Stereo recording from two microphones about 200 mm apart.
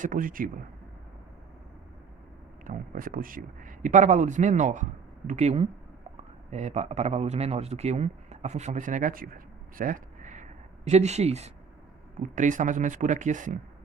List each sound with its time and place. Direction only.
0.0 s speech: 40° right (ahead or behind)
2.6 s a man's voice: 45° right (ahead or behind)